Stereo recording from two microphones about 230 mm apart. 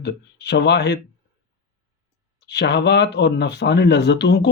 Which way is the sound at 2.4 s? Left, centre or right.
Left.